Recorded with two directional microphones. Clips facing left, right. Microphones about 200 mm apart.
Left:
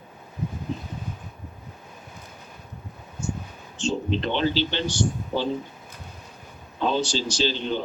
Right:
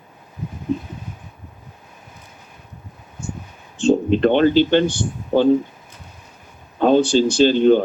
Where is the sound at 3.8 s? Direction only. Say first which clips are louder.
Right 11 dB; 55° right (ahead or behind).